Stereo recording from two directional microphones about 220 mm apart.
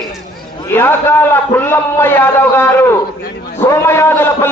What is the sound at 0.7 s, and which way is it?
A man's voice, 10° left (ahead or behind).